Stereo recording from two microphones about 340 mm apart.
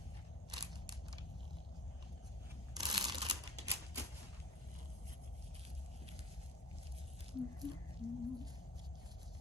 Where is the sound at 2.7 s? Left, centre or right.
Centre.